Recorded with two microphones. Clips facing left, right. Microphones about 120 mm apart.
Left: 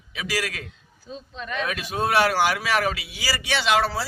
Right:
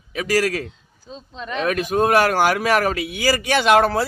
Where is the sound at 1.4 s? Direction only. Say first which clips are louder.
Right 3 dB; 30° right (ahead or behind).